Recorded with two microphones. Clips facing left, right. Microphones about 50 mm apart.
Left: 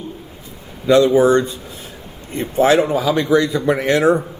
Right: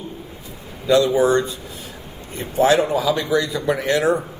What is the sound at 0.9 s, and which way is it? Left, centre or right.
Speech, left.